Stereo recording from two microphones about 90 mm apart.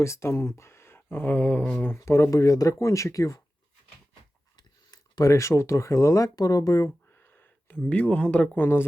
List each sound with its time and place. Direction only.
0.0 s speech: 30° left (ahead or behind)
2.0 s speech: 35° left (ahead or behind)
4.5 s speech: 50° left (ahead or behind)
7.2 s speech: 20° left (ahead or behind)
8.6 s speech: 25° left (ahead or behind)